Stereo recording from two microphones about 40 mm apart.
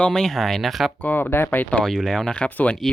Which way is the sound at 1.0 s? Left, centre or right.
Left.